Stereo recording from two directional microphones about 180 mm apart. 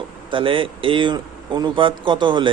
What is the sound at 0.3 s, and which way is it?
Speech, 30° right (ahead or behind).